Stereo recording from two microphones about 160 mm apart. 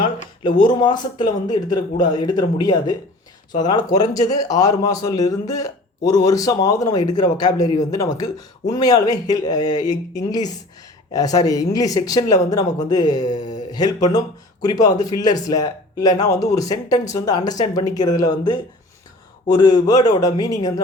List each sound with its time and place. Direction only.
0.4 s speech: 30° left (ahead or behind)